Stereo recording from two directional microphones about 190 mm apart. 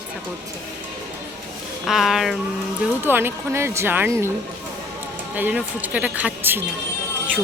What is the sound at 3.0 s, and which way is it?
Speech, 10° right (ahead or behind).